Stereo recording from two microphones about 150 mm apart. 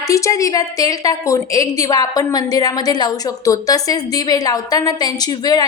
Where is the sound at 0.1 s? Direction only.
20° left (ahead or behind).